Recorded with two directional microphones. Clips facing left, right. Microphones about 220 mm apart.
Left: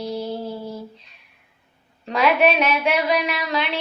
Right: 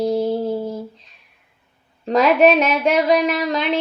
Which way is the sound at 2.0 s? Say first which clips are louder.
Right 5 dB; 45° right (ahead or behind).